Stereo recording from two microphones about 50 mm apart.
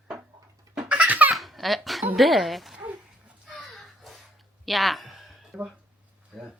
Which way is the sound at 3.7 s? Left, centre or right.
Centre.